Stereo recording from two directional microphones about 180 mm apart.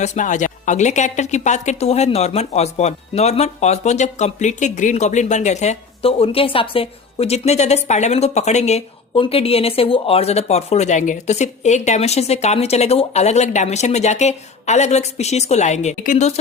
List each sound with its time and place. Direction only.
0.0 s speech: 40° left (ahead or behind)